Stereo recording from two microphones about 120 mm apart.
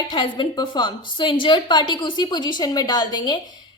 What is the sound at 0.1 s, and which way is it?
A woman's voice, 40° left (ahead or behind).